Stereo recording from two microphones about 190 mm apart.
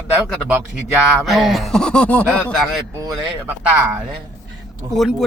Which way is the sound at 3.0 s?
10° right (ahead or behind).